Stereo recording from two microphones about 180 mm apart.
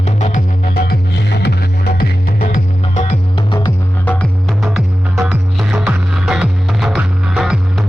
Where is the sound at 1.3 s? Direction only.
70° left (ahead or behind).